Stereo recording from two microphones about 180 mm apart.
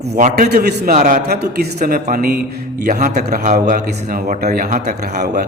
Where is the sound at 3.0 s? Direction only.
45° right (ahead or behind).